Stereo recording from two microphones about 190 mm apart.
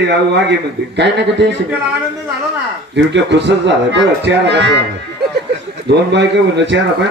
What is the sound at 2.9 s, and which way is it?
Music, 65° right (ahead or behind).